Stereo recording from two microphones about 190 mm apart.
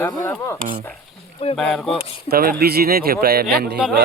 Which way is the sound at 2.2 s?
55° right (ahead or behind).